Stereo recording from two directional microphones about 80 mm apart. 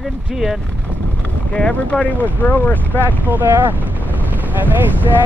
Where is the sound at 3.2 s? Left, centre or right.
Right.